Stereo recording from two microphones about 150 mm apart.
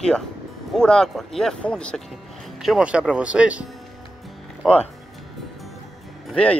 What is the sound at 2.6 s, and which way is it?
Speech, 5° right (ahead or behind).